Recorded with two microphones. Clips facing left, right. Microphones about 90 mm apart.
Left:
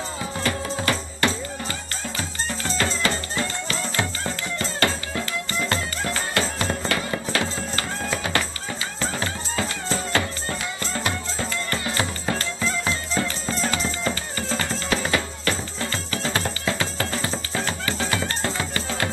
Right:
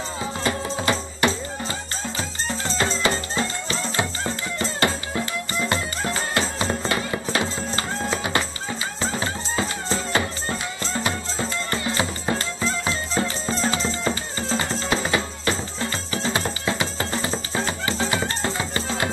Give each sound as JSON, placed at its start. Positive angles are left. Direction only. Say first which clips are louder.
{"t": 0.4, "sound": "music", "louder": "even", "side_deg": -25}